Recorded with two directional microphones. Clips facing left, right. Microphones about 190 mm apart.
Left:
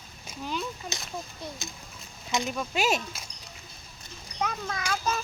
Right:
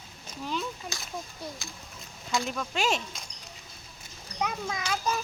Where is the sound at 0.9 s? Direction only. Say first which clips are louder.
Left 2 dB; 20° left (ahead or behind).